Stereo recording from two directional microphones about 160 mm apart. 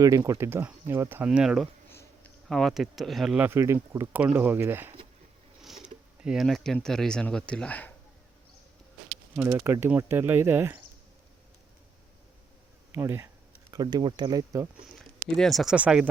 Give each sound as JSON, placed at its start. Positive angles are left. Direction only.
{"t": 0.0, "sound": "speech", "side_deg": -20}
{"t": 1.9, "sound": "insect", "side_deg": 15}
{"t": 2.5, "sound": "speech", "side_deg": 0}
{"t": 9.3, "sound": "speech", "side_deg": -15}
{"t": 12.9, "sound": "speech", "side_deg": -15}
{"t": 14.9, "sound": "speech", "side_deg": 0}